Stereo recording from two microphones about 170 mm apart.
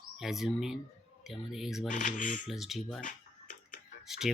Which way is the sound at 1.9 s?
50° left (ahead or behind).